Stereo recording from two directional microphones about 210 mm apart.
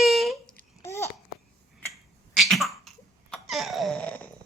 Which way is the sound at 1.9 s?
Centre (ahead or behind).